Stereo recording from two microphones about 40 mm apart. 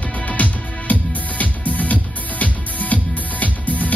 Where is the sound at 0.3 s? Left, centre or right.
Left.